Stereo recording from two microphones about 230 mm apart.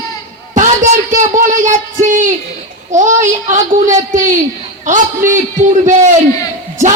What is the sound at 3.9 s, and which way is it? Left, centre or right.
Speech, centre.